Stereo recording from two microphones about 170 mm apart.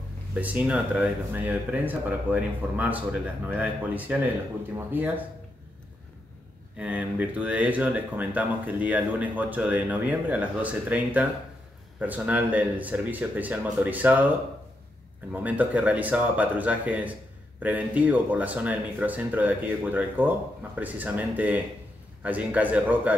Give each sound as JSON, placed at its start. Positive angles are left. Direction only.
{"t": 0.3, "sound": "speech", "side_deg": -10}
{"t": 6.8, "sound": "speech", "side_deg": -10}
{"t": 15.3, "sound": "speech", "side_deg": -10}